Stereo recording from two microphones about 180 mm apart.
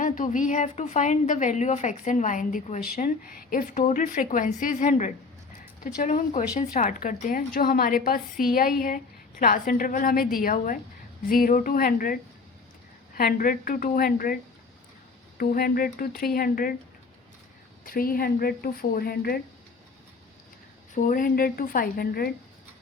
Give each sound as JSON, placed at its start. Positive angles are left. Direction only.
{"t": 0.0, "sound": "a woman's voice", "side_deg": 45}
{"t": 15.4, "sound": "a woman's voice", "side_deg": 55}
{"t": 17.8, "sound": "speech", "side_deg": 55}
{"t": 20.9, "sound": "a woman's voice", "side_deg": 50}